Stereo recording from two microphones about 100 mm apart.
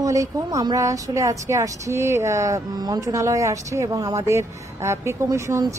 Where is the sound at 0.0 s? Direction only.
35° right (ahead or behind).